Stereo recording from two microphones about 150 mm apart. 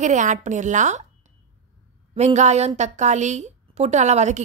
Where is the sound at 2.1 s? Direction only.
50° right (ahead or behind).